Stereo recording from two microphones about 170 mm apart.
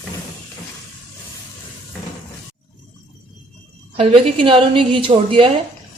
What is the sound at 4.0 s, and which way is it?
A woman's voice, 35° right (ahead or behind).